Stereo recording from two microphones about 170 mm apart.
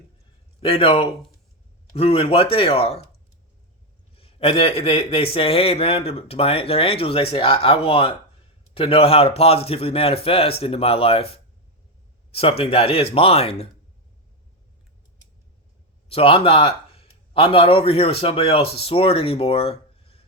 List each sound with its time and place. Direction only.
0.6 s a man's voice: 35° left (ahead or behind)
4.1 s a man's voice: 35° left (ahead or behind)
16.0 s a man's voice: 35° left (ahead or behind)